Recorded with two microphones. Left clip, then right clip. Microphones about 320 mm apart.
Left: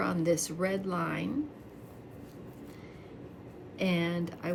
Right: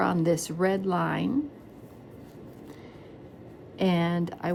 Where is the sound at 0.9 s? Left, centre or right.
Right.